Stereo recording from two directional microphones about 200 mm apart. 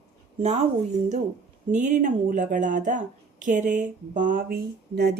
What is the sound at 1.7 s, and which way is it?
A woman's voice, 35° right (ahead or behind).